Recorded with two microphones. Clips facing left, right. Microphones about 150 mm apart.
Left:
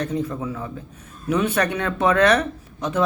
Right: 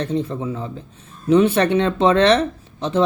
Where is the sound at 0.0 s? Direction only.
30° right (ahead or behind).